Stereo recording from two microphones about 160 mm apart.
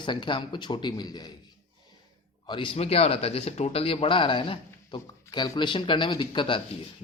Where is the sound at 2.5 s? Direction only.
35° left (ahead or behind).